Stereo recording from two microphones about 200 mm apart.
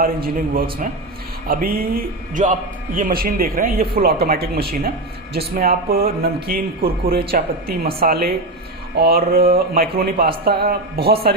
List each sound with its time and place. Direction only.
0.0 s speech: 45° right (ahead or behind)
7.1 s speech: 50° right (ahead or behind)